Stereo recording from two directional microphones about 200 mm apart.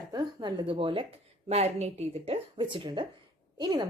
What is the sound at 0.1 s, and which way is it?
A woman's voice, 20° right (ahead or behind).